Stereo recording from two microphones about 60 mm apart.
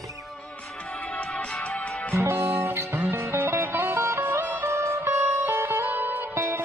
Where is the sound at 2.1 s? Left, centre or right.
Right.